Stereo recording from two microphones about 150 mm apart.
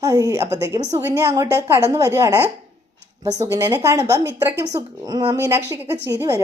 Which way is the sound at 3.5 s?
15° right (ahead or behind).